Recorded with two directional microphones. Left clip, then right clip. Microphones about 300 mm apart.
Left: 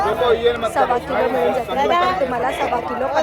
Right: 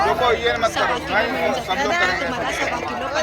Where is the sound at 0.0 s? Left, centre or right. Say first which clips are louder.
Left 1 dB; right.